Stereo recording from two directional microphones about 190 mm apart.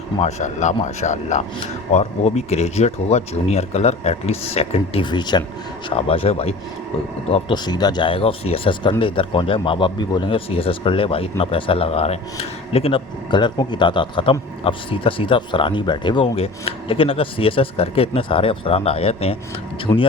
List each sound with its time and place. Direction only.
0.2 s speech: 35° left (ahead or behind)
19.9 s speech: 20° left (ahead or behind)